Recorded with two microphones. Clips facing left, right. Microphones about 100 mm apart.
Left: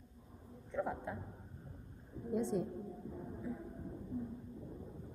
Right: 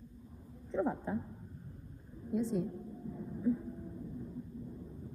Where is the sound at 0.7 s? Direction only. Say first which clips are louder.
Right 5 dB; 30° right (ahead or behind).